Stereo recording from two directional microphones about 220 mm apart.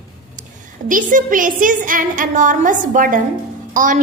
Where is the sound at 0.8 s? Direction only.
35° right (ahead or behind).